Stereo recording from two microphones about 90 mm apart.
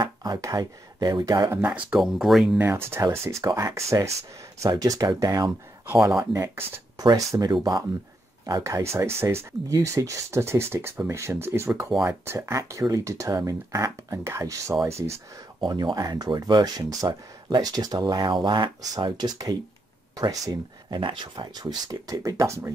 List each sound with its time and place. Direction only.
0.0 s speech: 50° right (ahead or behind)
2.0 s speech: 5° right (ahead or behind)
2.6 s speech: 25° right (ahead or behind); by 5.5 s 45° right (ahead or behind)
6.0 s speech: 30° right (ahead or behind)
7.0 s speech: 40° right (ahead or behind)
8.7 s speech: 30° right (ahead or behind)
15.6 s speech: 50° right (ahead or behind)
20.2 s speech: 40° right (ahead or behind)
20.9 s speech: 60° right (ahead or behind); by 22.7 s 35° right (ahead or behind)